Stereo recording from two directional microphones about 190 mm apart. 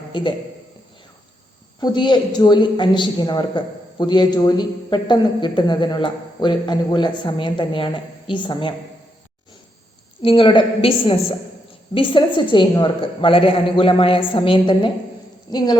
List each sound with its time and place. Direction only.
0.1 s a man's voice: 25° left (ahead or behind)
1.8 s a woman's voice: 25° left (ahead or behind)
10.2 s a woman's voice: 25° left (ahead or behind)